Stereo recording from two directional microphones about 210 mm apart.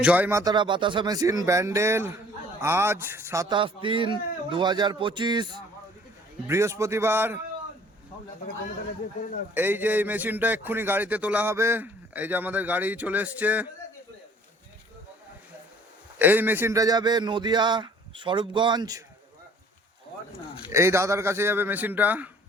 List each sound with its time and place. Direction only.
0.0 s a man's voice: 5° right (ahead or behind)
3.5 s a man's voice: 25° right (ahead or behind)
9.6 s a man's voice: 10° right (ahead or behind)
16.1 s a man's voice: 10° right (ahead or behind)
20.7 s a man's voice: 15° right (ahead or behind)